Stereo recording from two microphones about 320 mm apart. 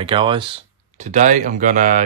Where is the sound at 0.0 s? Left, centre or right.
Centre.